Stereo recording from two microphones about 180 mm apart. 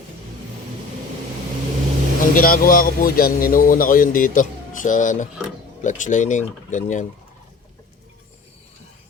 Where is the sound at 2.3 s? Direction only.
50° left (ahead or behind).